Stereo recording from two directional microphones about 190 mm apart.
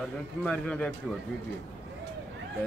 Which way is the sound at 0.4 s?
5° left (ahead or behind).